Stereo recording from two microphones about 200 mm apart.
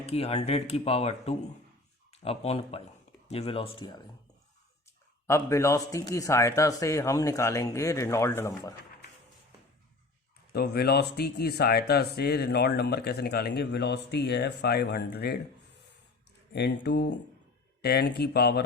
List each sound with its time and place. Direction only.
0.0 s speech: 30° left (ahead or behind)
5.2 s a man's voice: 15° left (ahead or behind)
10.5 s speech: 50° left (ahead or behind)
16.5 s speech: 55° left (ahead or behind)